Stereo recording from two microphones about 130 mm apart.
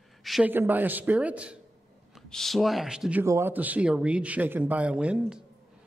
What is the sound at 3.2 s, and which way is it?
Speech, 20° right (ahead or behind).